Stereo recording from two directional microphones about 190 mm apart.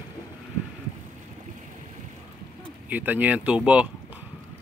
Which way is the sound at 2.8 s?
10° right (ahead or behind).